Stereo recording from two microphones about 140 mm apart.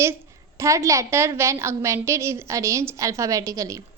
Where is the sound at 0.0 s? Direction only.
20° right (ahead or behind).